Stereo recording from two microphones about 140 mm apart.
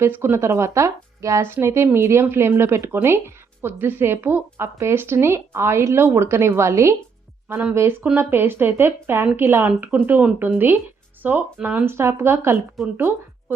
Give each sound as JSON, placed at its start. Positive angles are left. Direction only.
{"t": 0.0, "sound": "speech", "side_deg": -15}
{"t": 12.8, "sound": "a woman's voice", "side_deg": 0}